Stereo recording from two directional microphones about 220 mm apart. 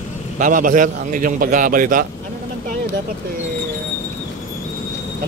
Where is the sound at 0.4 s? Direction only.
40° right (ahead or behind).